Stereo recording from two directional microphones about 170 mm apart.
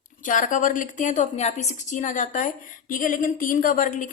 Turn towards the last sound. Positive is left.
turn(degrees=50)  # may be behind; listen again after turning